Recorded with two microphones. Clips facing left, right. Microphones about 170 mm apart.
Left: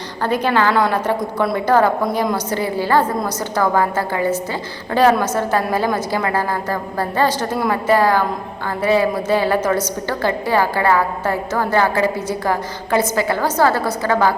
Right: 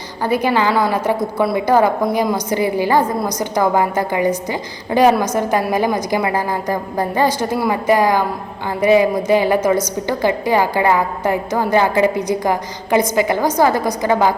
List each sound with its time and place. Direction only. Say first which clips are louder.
0.2 s a woman's voice: right 1 dB; 10° right (ahead or behind)